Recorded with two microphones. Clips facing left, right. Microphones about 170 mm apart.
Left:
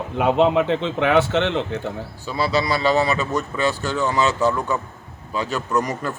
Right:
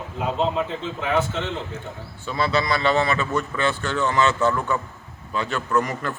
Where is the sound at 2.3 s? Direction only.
10° left (ahead or behind).